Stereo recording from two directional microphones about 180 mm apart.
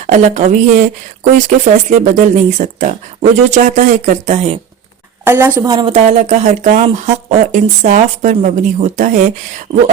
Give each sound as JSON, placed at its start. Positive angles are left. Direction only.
{"t": 0.1, "sound": "speech", "side_deg": -40}
{"t": 5.2, "sound": "a woman's voice", "side_deg": -10}
{"t": 5.7, "sound": "speech", "side_deg": -30}
{"t": 6.1, "sound": "speech", "side_deg": -40}